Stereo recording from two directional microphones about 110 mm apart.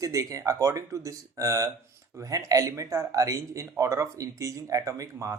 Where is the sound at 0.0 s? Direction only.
30° right (ahead or behind).